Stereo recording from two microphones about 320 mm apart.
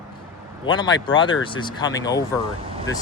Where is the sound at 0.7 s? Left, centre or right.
Centre.